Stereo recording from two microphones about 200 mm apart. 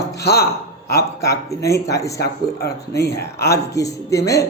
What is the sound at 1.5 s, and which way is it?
Speech, 15° left (ahead or behind).